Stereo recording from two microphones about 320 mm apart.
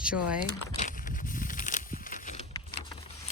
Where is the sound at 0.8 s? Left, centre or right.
Left.